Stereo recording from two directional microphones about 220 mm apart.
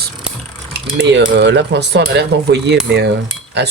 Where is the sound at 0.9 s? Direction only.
50° right (ahead or behind).